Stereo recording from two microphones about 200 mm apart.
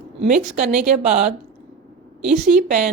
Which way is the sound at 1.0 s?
35° right (ahead or behind).